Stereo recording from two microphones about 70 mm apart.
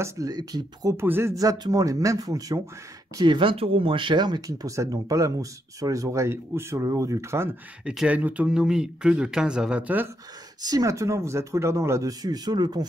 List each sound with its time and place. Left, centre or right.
0.2 s speech: right
0.9 s speech: right
1.3 s speech: right
3.2 s speech: right
4.1 s speech: right
4.5 s speech: right
7.8 s speech: centre
8.1 s speech: right
10.6 s speech: right
12.1 s speech: right